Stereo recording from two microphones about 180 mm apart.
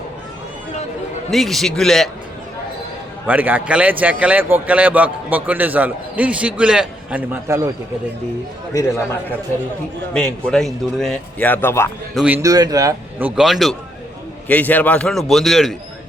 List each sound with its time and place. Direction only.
1.3 s a man's voice: centre (ahead or behind)
3.2 s a man's voice: 10° right (ahead or behind)
8.7 s a man's voice: 15° left (ahead or behind)
10.2 s a man's voice: 5° left (ahead or behind)
12.1 s a man's voice: 5° right (ahead or behind)
12.4 s a man's voice: 20° right (ahead or behind); by 15.7 s centre (ahead or behind)